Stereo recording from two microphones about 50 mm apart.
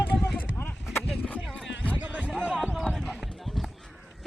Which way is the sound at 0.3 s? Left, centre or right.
Left.